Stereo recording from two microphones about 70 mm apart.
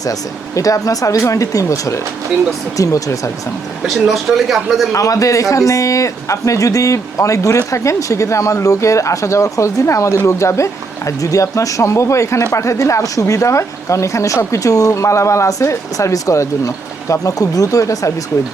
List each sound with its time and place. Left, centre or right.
0.0 s speech: left
3.8 s speech: centre
4.9 s speech: left